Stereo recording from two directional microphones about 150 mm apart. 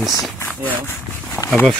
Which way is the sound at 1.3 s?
15° left (ahead or behind).